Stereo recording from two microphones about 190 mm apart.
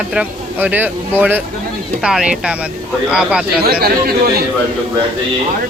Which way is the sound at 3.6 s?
55° right (ahead or behind).